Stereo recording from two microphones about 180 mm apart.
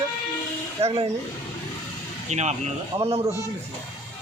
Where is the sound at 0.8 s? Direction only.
35° right (ahead or behind).